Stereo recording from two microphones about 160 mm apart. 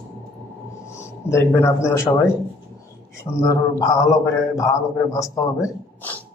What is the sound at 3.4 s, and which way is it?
A man's voice, 20° left (ahead or behind).